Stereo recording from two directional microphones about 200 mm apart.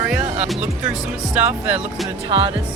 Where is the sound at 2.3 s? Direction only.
25° right (ahead or behind).